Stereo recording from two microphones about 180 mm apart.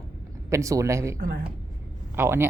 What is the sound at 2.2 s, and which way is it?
Speech, 15° right (ahead or behind).